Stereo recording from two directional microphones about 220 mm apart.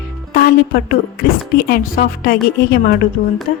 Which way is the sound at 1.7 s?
40° left (ahead or behind).